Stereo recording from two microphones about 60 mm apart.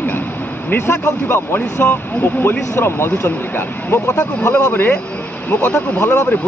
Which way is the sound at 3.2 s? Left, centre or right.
Left.